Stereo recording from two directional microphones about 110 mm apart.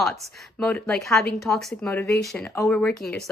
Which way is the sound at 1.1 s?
5° left (ahead or behind).